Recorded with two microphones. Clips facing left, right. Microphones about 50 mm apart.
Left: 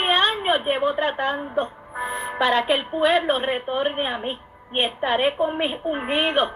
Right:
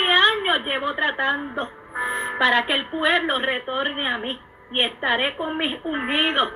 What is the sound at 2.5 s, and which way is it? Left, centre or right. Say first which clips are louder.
A woman's voice: even; right.